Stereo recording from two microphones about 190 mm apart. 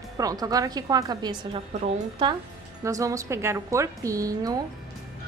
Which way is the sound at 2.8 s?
15° right (ahead or behind).